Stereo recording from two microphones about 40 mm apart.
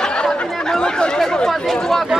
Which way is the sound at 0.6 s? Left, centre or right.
Centre.